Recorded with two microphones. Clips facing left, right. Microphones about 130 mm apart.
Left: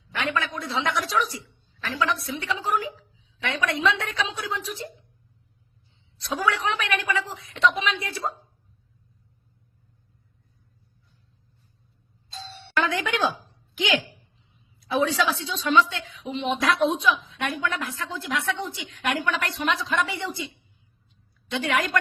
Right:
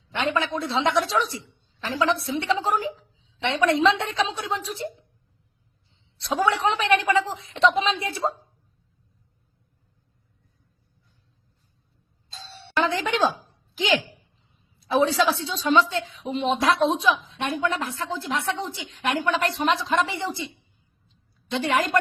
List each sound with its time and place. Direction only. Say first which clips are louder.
0.1 s a woman's voice: right 3 dB; 30° right (ahead or behind)
6.2 s a woman's voice: right 3 dB; 30° right (ahead or behind)
12.9 s a woman's voice: right 2 dB; 30° right (ahead or behind)
21.5 s a woman's voice: right 2 dB; 30° right (ahead or behind)